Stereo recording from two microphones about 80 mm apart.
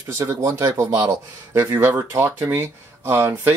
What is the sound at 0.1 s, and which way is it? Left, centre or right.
Speech, right.